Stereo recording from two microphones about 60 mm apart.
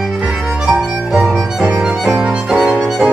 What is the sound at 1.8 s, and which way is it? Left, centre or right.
Music, centre.